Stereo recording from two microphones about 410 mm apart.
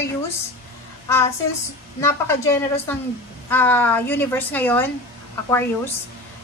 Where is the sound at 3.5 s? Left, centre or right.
Centre.